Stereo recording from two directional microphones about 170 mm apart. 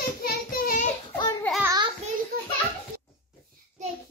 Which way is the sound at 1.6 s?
25° right (ahead or behind).